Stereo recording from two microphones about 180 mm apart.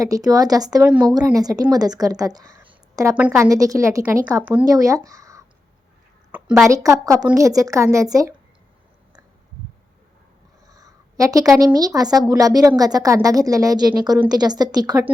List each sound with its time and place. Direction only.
0.0 s a woman's voice: 20° right (ahead or behind)
6.9 s a woman's voice: 20° right (ahead or behind)
10.7 s a sound: 20° right (ahead or behind)
11.5 s a woman's voice: 20° right (ahead or behind)